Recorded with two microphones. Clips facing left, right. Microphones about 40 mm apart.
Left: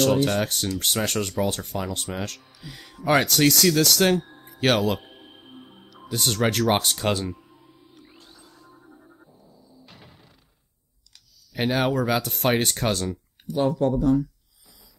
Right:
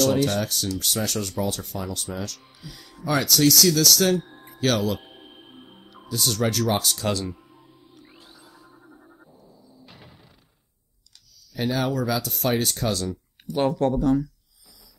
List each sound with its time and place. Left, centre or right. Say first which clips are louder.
0.2 s speech: left 1 dB; left
6.0 s speech: left 1 dB; left
8.0 s music: right 1 dB; centre
9.7 s a sound: even; centre
11.5 s speech: left 2 dB; left
13.5 s speech: even; right